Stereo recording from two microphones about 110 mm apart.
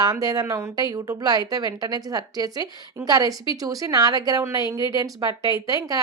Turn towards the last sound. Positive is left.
turn(degrees=-35)  # may be behind; listen again after turning